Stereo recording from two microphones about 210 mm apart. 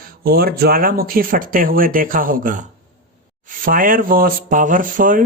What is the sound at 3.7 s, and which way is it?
Speech, 40° right (ahead or behind).